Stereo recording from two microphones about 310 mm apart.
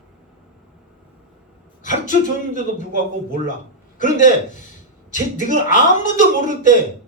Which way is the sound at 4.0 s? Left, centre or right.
Left.